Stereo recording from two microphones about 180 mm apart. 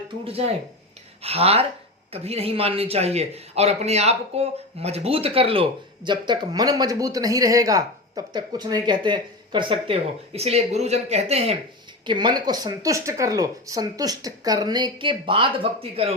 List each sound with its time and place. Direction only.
0.3 s a man's voice: 35° right (ahead or behind)
12.0 s speech: 25° right (ahead or behind)